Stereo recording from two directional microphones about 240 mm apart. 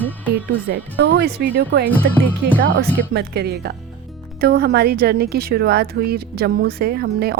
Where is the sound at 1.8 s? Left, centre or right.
Centre.